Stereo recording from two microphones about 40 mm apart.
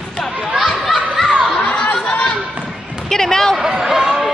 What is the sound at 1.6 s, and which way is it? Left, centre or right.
Chatter, left.